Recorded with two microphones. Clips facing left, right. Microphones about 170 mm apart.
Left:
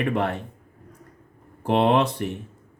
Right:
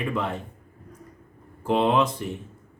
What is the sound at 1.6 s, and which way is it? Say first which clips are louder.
Speech: left 2 dB; 65° left (ahead or behind).